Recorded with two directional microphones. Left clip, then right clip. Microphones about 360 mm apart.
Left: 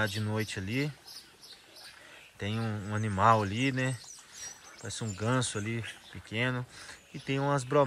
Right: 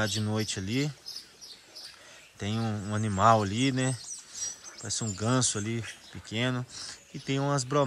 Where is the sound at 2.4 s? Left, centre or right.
Centre.